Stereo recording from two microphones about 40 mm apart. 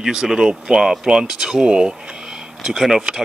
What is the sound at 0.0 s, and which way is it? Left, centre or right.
Speech, centre.